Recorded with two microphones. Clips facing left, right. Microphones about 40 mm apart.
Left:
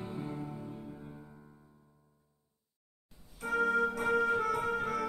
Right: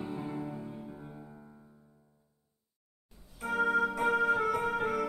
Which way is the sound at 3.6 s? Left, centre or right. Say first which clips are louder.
Right 1 dB; centre.